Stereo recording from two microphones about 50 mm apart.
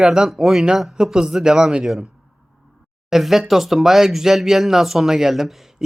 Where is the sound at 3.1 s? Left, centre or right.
Centre.